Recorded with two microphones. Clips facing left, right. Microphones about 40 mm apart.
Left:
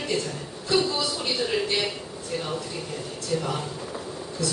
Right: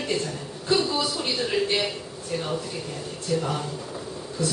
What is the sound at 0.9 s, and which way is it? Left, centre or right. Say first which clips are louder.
A man's voice: right 1 dB; centre.